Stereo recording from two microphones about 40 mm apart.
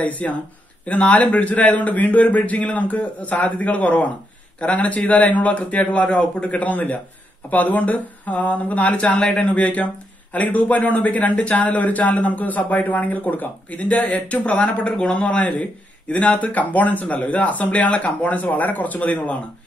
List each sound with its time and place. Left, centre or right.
0.0 s a man's voice: left